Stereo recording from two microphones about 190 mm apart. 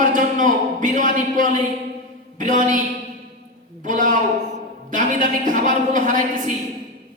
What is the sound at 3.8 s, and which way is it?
A man's voice, 40° right (ahead or behind).